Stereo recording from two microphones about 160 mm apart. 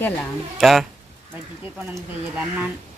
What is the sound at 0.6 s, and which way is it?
Speech, centre (ahead or behind).